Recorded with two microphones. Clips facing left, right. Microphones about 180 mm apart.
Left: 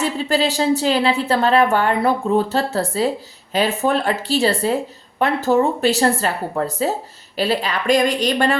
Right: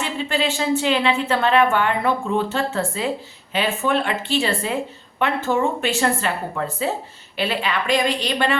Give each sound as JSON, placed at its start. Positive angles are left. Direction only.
{"t": 0.0, "sound": "a woman's voice", "side_deg": 40}